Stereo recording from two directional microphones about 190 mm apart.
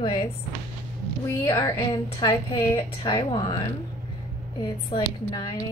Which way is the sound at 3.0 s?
25° left (ahead or behind).